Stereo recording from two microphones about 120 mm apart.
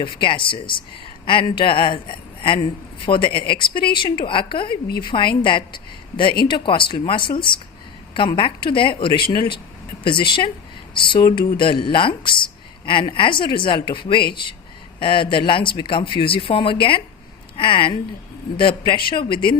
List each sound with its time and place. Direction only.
0.0 s a woman's voice: 45° left (ahead or behind)